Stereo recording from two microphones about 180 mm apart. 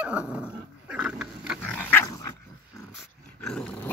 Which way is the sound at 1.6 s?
10° left (ahead or behind).